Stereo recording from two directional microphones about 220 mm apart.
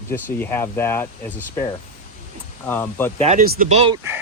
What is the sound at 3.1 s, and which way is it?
Speech, 30° right (ahead or behind).